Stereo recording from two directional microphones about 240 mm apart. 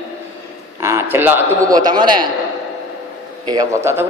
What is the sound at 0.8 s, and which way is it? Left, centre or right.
A man's voice, centre.